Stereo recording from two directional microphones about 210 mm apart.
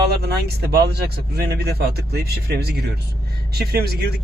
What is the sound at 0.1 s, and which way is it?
Speech, 50° right (ahead or behind).